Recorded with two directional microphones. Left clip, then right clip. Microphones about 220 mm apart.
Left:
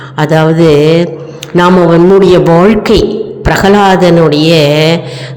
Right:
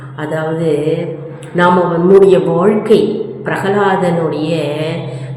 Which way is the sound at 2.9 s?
45° left (ahead or behind).